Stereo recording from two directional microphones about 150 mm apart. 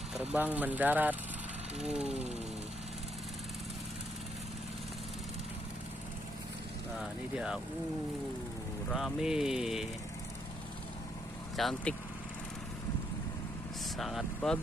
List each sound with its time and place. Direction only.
0.3 s speech: 10° right (ahead or behind)
2.0 s speech: 45° right (ahead or behind)
7.3 s speech: 5° right (ahead or behind)
8.9 s speech: centre (ahead or behind)
11.5 s speech: 5° left (ahead or behind)
13.9 s speech: centre (ahead or behind)